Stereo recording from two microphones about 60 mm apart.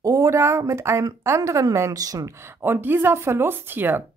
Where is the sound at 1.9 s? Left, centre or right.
Right.